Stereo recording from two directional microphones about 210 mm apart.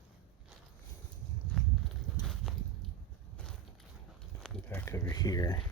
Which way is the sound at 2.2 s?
Centre (ahead or behind).